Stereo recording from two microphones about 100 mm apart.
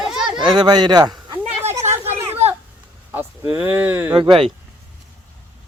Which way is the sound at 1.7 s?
25° right (ahead or behind).